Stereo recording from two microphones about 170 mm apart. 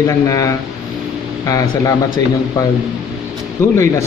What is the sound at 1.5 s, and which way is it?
Speech, 20° left (ahead or behind).